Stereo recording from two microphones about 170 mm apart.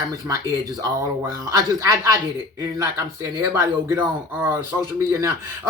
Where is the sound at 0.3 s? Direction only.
20° right (ahead or behind).